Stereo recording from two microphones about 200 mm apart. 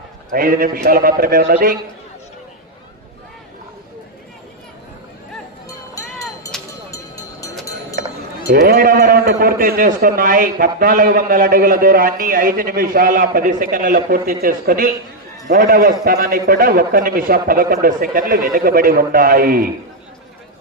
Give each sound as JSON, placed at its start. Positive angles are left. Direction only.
{"t": 0.3, "sound": "a man's voice", "side_deg": -45}
{"t": 8.5, "sound": "a man's voice", "side_deg": -45}